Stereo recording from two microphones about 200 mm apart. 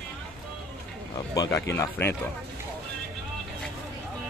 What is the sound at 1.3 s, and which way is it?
Speech, 15° left (ahead or behind).